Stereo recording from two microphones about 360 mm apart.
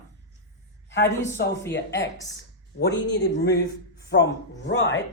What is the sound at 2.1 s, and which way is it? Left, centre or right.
Speech, centre.